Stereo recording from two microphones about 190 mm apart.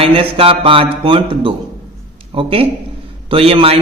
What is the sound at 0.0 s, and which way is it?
A man's voice, 30° right (ahead or behind).